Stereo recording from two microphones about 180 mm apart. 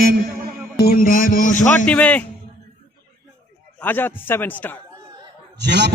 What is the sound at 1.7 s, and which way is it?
Speech, 5° left (ahead or behind).